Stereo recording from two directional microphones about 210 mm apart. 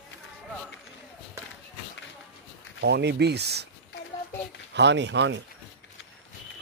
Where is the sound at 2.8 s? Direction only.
55° right (ahead or behind).